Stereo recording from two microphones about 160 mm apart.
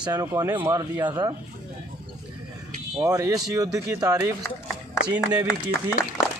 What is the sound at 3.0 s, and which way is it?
Speech, 20° right (ahead or behind).